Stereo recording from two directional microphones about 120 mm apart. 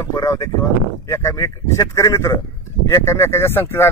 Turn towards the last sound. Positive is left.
turn(degrees=20)  # may be behind; listen again after turning